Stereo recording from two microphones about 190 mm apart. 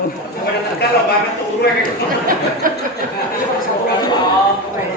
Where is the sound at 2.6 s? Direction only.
45° right (ahead or behind).